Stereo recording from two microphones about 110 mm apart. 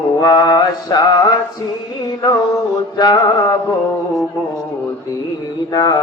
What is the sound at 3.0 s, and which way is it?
Mantra, 35° left (ahead or behind).